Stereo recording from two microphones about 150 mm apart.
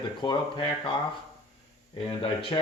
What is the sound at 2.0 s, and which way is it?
Speech, 35° left (ahead or behind).